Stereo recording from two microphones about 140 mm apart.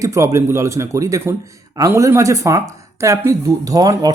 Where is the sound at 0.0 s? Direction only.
20° right (ahead or behind).